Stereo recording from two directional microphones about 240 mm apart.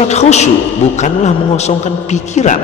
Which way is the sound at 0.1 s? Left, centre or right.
Left.